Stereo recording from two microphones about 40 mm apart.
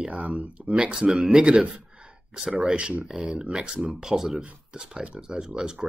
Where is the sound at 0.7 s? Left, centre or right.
Right.